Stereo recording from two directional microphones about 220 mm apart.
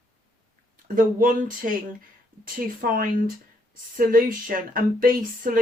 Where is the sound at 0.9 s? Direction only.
40° right (ahead or behind).